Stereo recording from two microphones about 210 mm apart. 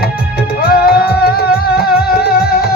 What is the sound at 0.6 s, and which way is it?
Music, 45° left (ahead or behind).